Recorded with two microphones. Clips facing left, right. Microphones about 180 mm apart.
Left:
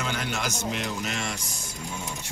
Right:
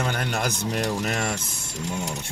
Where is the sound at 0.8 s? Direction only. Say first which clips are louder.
Right 5 dB; 40° right (ahead or behind); by 1.6 s 60° right (ahead or behind).